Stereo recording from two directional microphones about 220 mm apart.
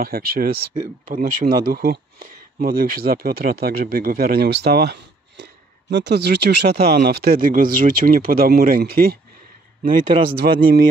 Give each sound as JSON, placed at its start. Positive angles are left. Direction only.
{"t": 0.0, "sound": "speech", "side_deg": -45}
{"t": 10.3, "sound": "speech", "side_deg": -45}